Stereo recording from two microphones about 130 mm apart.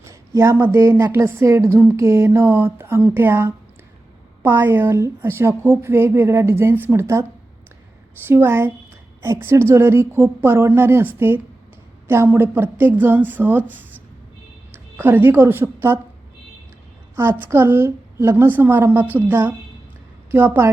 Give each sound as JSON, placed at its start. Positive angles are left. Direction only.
{"t": 0.0, "sound": "a woman's voice", "side_deg": -20}
{"t": 8.3, "sound": "a woman's voice", "side_deg": -20}
{"t": 17.2, "sound": "a woman's voice", "side_deg": -15}